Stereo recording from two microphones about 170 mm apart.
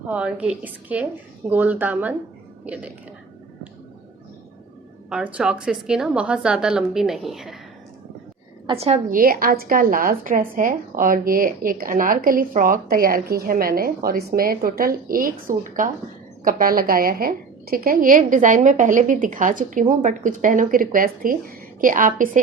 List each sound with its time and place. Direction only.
0.1 s a woman's voice: 5° right (ahead or behind)
5.0 s a woman's voice: 5° right (ahead or behind)
8.6 s a woman's voice: 35° right (ahead or behind)
9.0 s a woman's voice: 55° right (ahead or behind)